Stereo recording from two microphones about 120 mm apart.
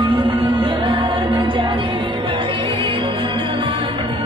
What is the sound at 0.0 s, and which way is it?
Music, 45° right (ahead or behind).